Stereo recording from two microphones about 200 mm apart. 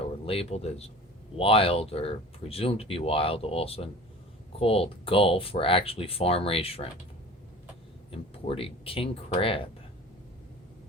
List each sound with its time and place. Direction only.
0.3 s speech: 30° left (ahead or behind)
8.1 s speech: 30° left (ahead or behind)